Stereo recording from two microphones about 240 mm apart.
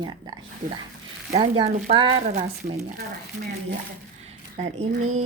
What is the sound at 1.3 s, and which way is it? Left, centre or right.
Speech, right.